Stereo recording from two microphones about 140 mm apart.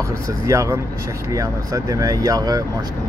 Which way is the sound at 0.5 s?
20° right (ahead or behind).